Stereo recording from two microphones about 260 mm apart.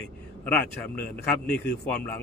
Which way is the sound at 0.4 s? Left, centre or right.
Centre.